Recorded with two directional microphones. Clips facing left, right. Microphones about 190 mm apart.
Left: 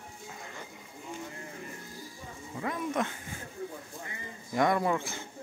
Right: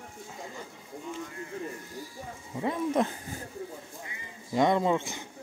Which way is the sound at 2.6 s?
30° right (ahead or behind).